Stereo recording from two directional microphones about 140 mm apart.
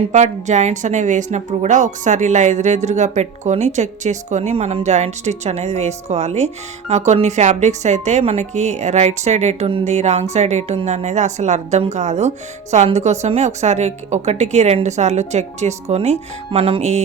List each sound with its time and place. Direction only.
0.1 s a woman's voice: 60° right (ahead or behind)